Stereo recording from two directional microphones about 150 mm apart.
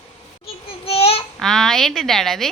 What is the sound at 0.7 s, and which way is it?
Child singing, 40° left (ahead or behind).